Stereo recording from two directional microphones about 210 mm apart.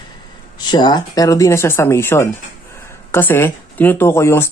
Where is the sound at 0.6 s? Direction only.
20° left (ahead or behind).